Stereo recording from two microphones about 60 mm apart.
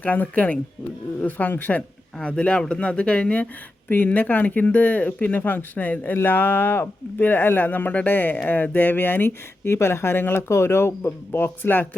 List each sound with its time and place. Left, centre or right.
0.0 s speech: left
2.1 s speech: centre
3.8 s speech: left